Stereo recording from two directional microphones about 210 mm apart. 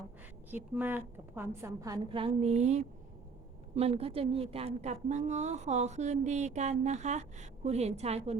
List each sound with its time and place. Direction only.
0.5 s a woman's voice: 10° right (ahead or behind); by 8.4 s 30° right (ahead or behind)